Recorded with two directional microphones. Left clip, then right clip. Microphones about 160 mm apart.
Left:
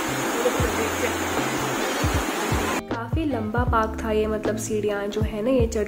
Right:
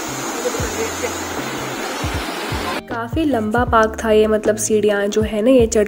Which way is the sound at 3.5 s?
35° right (ahead or behind).